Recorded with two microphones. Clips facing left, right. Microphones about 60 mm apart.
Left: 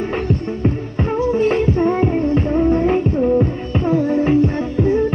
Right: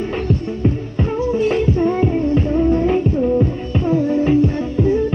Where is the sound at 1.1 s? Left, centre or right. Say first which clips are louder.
Left 1 dB; left.